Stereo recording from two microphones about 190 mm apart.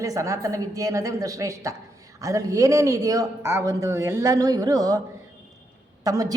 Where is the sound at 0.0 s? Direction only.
15° right (ahead or behind).